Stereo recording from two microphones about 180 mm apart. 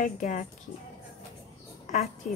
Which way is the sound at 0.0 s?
45° left (ahead or behind).